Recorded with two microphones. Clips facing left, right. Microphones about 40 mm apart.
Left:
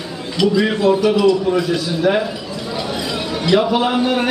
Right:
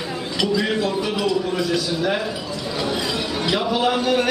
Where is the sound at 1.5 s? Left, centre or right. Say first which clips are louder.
Left 3 dB; centre.